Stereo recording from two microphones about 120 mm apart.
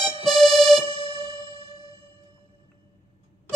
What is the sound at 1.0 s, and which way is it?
Music, 50° left (ahead or behind).